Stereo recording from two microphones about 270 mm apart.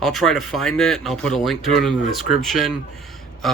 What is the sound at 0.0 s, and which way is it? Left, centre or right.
Speech, centre.